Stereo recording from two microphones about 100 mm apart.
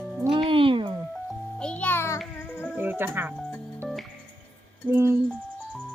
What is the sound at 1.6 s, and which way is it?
Music, 10° left (ahead or behind).